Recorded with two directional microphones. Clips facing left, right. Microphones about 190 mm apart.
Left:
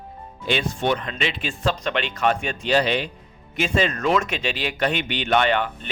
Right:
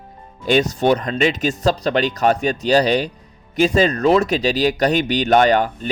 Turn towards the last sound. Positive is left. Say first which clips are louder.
# right 6 dB
turn(degrees=-40)  # may be behind; listen again after turning